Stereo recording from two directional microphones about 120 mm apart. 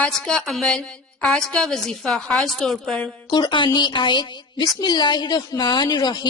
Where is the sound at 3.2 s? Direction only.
40° left (ahead or behind).